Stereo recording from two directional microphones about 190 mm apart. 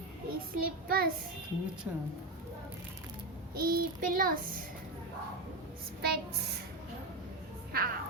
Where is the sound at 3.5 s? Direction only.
55° right (ahead or behind).